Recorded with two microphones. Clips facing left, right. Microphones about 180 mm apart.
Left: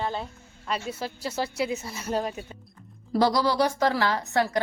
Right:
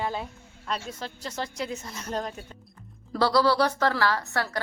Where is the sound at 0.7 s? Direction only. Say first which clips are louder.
Left 3 dB; 5° left (ahead or behind).